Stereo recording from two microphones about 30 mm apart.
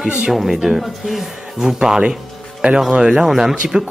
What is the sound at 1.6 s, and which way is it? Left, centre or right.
Speech, right.